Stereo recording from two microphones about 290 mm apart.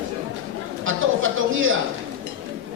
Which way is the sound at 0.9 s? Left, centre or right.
Right.